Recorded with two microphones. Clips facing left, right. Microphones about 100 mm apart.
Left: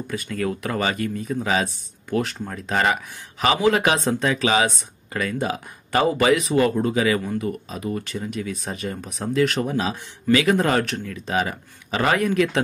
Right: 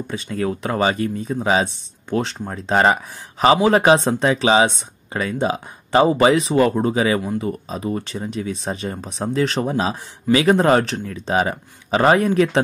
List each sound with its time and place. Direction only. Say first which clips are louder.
0.1 s speech: right 2 dB; 25° right (ahead or behind)